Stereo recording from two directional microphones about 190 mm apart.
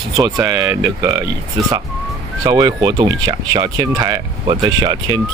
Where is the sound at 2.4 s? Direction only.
20° right (ahead or behind).